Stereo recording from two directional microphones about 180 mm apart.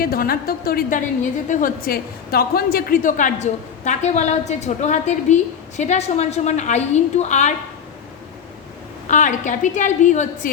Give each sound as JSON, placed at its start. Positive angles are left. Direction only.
{"t": 0.0, "sound": "a woman's voice", "side_deg": 55}
{"t": 9.0, "sound": "a woman's voice", "side_deg": 45}